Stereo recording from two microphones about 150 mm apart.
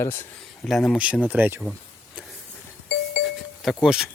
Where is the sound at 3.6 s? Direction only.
5° right (ahead or behind).